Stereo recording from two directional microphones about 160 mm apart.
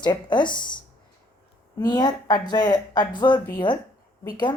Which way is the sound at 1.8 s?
25° left (ahead or behind).